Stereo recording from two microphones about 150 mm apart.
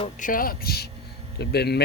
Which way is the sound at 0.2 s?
65° left (ahead or behind).